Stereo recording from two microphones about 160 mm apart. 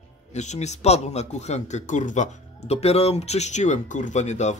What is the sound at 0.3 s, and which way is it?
Speech, 45° left (ahead or behind).